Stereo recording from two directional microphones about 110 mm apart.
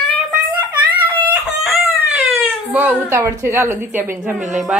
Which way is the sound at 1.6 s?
Centre (ahead or behind).